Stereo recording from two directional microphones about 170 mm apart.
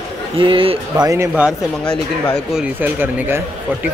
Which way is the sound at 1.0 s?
10° right (ahead or behind).